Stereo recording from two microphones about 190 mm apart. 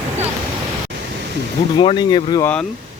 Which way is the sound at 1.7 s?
25° left (ahead or behind).